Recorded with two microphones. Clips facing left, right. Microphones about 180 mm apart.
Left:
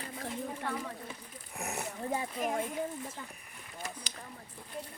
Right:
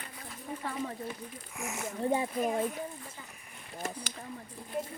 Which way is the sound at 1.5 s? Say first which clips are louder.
Left 1 dB; 35° left (ahead or behind).